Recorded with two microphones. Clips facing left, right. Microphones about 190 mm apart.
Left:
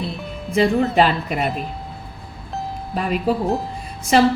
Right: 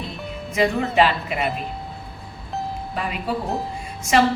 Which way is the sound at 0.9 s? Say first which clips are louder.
Left 2 dB; 40° left (ahead or behind).